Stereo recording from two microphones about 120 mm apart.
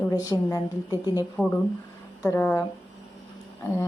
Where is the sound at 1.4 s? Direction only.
15° left (ahead or behind).